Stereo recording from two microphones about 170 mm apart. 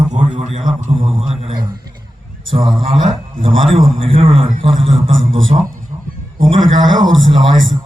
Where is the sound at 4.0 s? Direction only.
35° right (ahead or behind).